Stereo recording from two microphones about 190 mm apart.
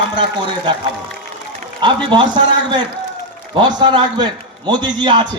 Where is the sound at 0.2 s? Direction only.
25° right (ahead or behind).